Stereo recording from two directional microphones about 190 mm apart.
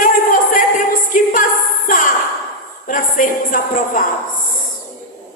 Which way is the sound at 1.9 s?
45° left (ahead or behind).